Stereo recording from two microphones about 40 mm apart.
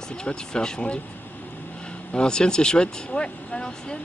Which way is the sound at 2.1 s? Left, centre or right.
Left.